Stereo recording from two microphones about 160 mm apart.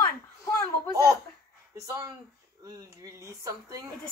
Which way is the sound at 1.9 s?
20° right (ahead or behind).